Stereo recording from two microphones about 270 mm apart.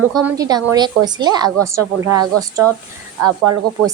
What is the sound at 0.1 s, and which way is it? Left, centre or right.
Speech, centre.